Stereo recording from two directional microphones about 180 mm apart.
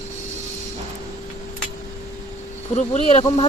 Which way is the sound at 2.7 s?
40° left (ahead or behind).